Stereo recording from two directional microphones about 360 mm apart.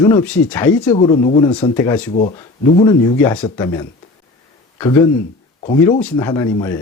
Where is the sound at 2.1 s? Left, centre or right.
Centre.